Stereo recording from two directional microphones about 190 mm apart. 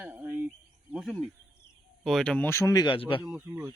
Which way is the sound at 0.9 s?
Centre (ahead or behind).